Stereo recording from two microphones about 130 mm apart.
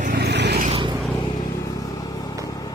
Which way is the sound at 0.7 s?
40° right (ahead or behind).